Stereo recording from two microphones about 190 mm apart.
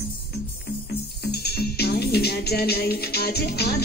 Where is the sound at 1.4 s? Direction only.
55° left (ahead or behind).